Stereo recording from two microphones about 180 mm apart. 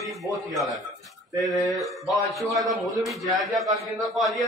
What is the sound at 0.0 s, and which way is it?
Speech, centre (ahead or behind).